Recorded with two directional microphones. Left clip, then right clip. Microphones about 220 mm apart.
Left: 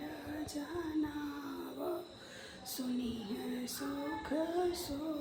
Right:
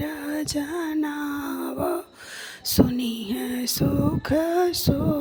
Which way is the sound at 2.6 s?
40° right (ahead or behind).